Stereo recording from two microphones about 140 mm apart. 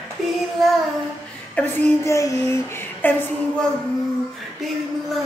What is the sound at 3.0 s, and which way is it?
Speech, 15° left (ahead or behind).